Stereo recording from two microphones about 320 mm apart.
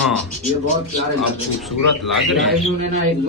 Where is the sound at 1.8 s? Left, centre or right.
Left.